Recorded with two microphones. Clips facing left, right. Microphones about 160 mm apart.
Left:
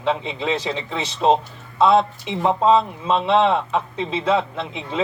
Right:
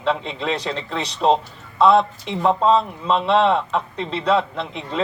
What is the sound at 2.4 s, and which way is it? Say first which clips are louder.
Speech: even; 15° left (ahead or behind).